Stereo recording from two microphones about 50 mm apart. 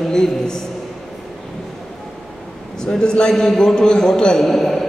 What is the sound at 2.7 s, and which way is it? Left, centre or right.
A man's voice, centre.